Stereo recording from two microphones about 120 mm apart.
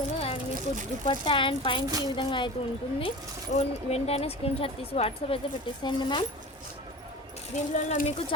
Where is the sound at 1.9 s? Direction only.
30° right (ahead or behind).